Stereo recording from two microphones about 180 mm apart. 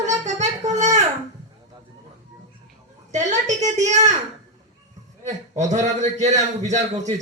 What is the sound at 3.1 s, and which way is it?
A woman's voice, 40° right (ahead or behind).